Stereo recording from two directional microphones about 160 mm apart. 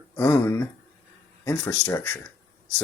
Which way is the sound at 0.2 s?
10° left (ahead or behind).